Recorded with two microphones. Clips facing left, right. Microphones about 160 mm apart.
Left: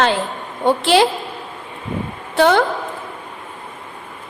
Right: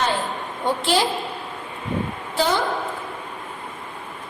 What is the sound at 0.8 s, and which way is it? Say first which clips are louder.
Speech: left 7 dB; 70° left (ahead or behind).